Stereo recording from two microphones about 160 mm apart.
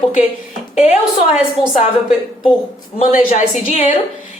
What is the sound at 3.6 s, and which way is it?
Speech, 50° left (ahead or behind).